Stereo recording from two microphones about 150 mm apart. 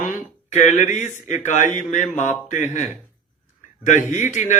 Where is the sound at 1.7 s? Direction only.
55° left (ahead or behind).